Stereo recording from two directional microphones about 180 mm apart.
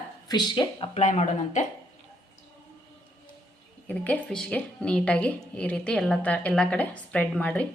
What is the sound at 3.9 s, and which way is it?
A woman's voice, 5° left (ahead or behind).